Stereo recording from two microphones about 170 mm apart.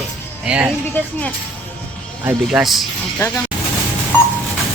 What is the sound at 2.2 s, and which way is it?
Speech, 5° right (ahead or behind).